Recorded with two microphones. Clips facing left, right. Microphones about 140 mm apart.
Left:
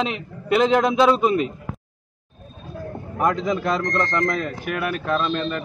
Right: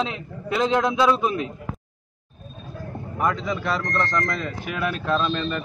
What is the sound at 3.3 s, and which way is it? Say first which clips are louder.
Speech: left 4 dB; 45° left (ahead or behind).